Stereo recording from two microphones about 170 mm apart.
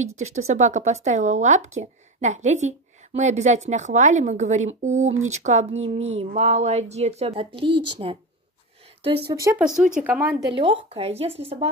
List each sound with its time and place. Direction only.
0.0 s speech: 40° right (ahead or behind)
9.3 s speech: 20° right (ahead or behind)
9.6 s speech: 5° right (ahead or behind)
10.5 s speech: 30° right (ahead or behind)